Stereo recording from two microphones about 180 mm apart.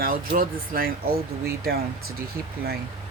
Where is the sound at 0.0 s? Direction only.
50° right (ahead or behind).